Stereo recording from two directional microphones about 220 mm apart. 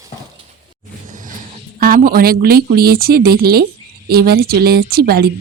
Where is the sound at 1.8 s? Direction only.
40° right (ahead or behind).